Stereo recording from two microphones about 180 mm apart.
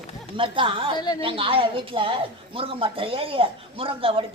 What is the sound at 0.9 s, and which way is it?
Speech, 25° left (ahead or behind).